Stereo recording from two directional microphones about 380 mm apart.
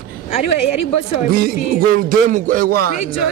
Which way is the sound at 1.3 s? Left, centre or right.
Right.